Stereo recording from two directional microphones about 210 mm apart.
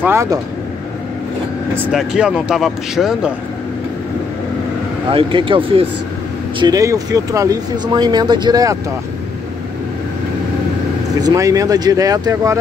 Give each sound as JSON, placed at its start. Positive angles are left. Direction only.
{"t": 0.0, "sound": "speech", "side_deg": -15}
{"t": 1.8, "sound": "speech", "side_deg": -5}
{"t": 5.1, "sound": "speech", "side_deg": -25}
{"t": 11.1, "sound": "speech", "side_deg": -15}